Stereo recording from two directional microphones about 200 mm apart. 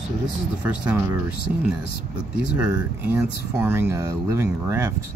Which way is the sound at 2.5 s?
5° right (ahead or behind).